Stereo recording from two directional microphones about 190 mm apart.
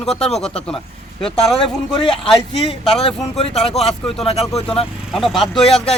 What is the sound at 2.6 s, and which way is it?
Speech, 30° left (ahead or behind).